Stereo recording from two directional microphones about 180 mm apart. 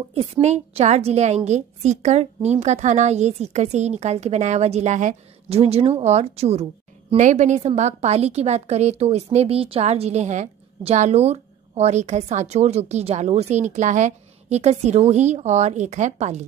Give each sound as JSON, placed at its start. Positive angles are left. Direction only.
{"t": 0.1, "sound": "a woman's voice", "side_deg": -35}